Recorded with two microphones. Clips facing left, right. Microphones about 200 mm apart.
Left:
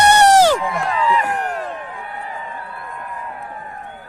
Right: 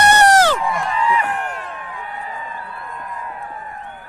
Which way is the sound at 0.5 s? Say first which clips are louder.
Left 1 dB; 65° left (ahead or behind).